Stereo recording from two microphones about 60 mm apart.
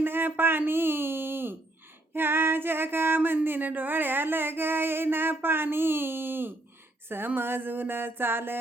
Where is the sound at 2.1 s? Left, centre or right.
Right.